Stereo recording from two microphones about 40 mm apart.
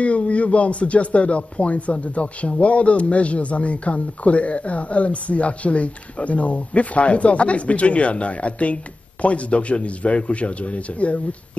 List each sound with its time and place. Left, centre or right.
0.0 s speech: left